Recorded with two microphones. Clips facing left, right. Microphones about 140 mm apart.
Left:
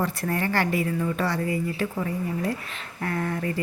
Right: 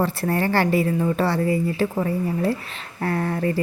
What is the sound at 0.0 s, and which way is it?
Speech, 30° right (ahead or behind).